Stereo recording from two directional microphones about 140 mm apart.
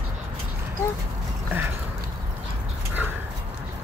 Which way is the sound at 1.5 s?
15° right (ahead or behind).